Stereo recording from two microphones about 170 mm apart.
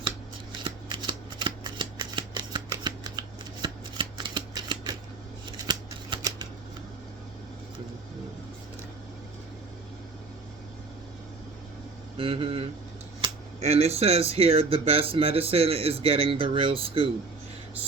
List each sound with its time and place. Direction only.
0.6 s shuffling cards: 25° right (ahead or behind)
5.5 s scissors: 25° right (ahead or behind)
12.1 s speech: 35° right (ahead or behind)